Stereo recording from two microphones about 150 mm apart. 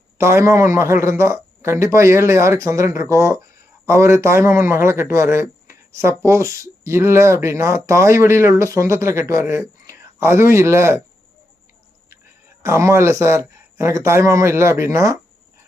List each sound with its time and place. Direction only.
0.2 s a man's voice: 20° right (ahead or behind)
12.6 s a man's voice: 20° right (ahead or behind)